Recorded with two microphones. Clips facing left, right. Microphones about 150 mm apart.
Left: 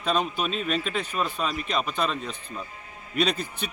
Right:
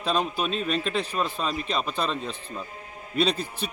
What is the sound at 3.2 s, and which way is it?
Speech, 30° right (ahead or behind).